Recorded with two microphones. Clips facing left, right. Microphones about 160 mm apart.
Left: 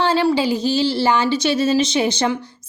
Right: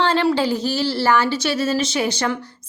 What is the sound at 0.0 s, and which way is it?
A woman's voice, 10° left (ahead or behind).